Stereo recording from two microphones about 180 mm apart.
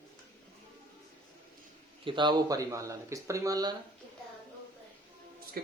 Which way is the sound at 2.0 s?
25° right (ahead or behind).